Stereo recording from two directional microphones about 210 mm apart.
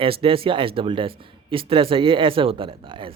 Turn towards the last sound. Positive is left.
turn(degrees=-25)  # may be behind; listen again after turning